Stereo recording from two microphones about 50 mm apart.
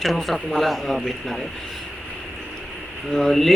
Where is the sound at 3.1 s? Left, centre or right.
Centre.